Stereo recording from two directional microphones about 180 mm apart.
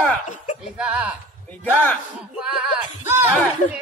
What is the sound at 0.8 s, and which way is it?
Speech, 5° right (ahead or behind).